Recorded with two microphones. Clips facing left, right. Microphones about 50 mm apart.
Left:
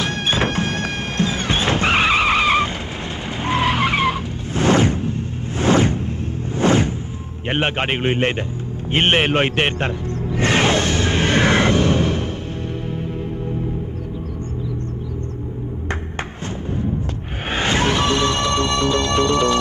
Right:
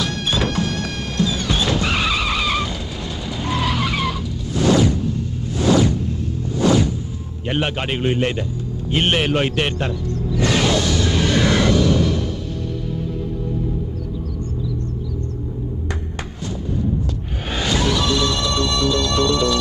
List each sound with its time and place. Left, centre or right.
0.0 s music: left
3.3 s vehicle: left
5.6 s whoosh: left
6.5 s music: left
7.4 s a man's voice: left
8.9 s music: left
17.5 s music: left